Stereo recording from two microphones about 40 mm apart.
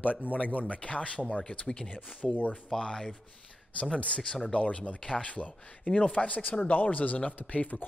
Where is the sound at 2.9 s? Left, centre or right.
Centre.